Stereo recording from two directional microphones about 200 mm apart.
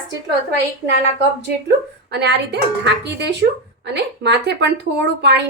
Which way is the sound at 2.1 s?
55° right (ahead or behind).